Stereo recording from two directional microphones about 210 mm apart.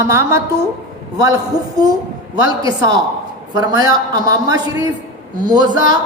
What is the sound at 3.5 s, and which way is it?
A woman's voice, 20° right (ahead or behind).